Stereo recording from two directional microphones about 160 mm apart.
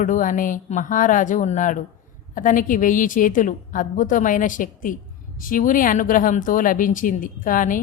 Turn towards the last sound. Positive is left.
turn(degrees=55)  # may be behind; listen again after turning